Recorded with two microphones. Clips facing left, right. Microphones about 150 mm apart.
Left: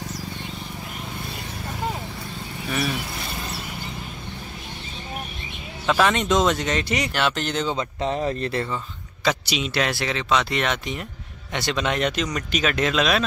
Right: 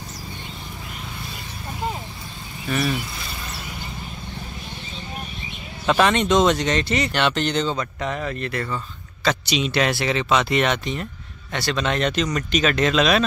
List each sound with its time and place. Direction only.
5.9 s speech: centre (ahead or behind)
7.7 s speech: 25° left (ahead or behind)
9.2 s speech: 10° left (ahead or behind)
11.5 s speech: 15° left (ahead or behind)